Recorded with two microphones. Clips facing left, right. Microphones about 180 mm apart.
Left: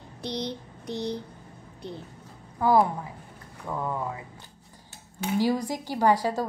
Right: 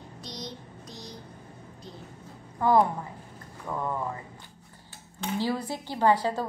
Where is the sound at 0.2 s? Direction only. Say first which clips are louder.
Left 9 dB; 65° left (ahead or behind).